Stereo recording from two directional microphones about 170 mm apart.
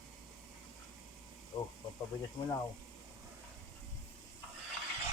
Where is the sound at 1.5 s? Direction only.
35° left (ahead or behind).